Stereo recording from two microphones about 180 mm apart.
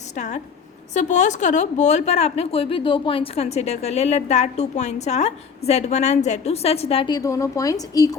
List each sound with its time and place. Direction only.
0.9 s a woman's voice: 40° left (ahead or behind); by 8.1 s 20° left (ahead or behind)